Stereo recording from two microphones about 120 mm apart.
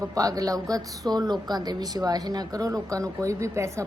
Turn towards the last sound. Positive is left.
turn(degrees=-25)  # may be behind; listen again after turning